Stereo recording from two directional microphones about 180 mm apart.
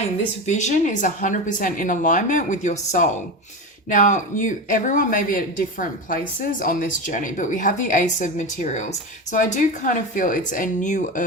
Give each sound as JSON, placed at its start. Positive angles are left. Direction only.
{"t": 0.4, "sound": "speech", "side_deg": 40}